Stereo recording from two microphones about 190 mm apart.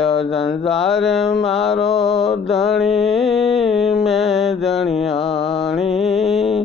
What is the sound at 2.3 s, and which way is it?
Mantra, centre (ahead or behind).